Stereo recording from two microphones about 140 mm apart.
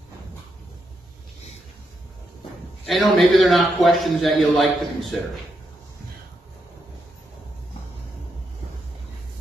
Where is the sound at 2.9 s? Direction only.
Centre (ahead or behind).